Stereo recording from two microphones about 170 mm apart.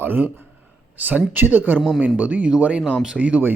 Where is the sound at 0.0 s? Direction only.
10° right (ahead or behind).